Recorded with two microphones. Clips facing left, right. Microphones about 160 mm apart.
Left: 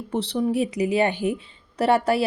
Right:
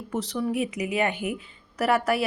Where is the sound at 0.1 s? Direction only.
30° left (ahead or behind).